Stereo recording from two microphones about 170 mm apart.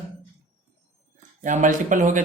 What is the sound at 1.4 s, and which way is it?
Speech, 45° right (ahead or behind).